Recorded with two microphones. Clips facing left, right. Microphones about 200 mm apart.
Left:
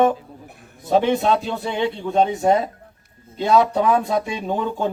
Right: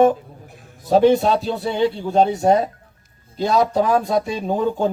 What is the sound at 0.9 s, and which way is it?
Speech, 35° right (ahead or behind).